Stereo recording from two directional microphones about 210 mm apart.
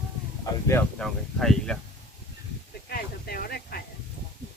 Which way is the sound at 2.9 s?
45° left (ahead or behind).